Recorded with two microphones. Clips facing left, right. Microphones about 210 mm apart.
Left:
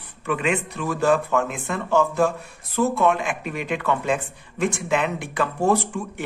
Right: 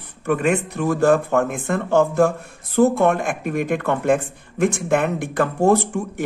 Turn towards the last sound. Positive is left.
turn(degrees=-50)  # may be behind; listen again after turning